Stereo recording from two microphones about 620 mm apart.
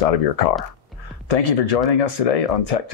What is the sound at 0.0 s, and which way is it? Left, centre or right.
Speech, left.